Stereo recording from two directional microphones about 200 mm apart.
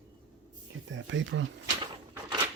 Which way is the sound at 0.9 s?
70° right (ahead or behind).